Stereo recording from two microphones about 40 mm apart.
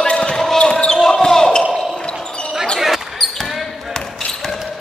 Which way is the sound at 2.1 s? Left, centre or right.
Left.